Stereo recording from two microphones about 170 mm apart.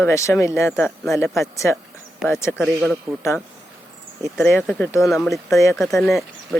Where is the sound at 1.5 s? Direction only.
15° left (ahead or behind).